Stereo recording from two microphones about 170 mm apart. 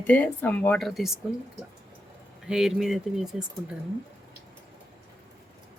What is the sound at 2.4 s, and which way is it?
Speech, 5° right (ahead or behind).